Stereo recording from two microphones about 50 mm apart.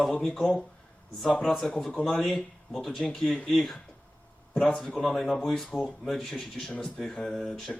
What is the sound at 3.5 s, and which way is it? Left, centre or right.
Speech, centre.